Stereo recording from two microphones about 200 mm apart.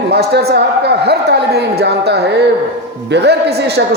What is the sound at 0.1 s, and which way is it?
A man's voice, 55° right (ahead or behind).